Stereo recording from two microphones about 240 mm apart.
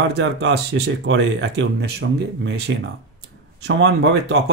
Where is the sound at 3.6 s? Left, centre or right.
Right.